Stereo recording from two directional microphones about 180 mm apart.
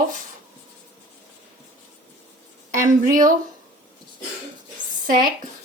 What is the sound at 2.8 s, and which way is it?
Speech, 45° right (ahead or behind).